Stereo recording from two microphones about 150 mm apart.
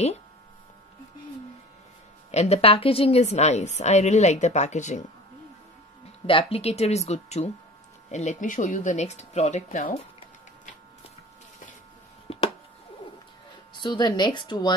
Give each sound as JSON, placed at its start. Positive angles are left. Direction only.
{"t": 2.3, "sound": "a woman's voice", "side_deg": 40}
{"t": 6.2, "sound": "a woman's voice", "side_deg": 35}
{"t": 12.3, "sound": "a sound", "side_deg": 40}
{"t": 13.7, "sound": "speech", "side_deg": 30}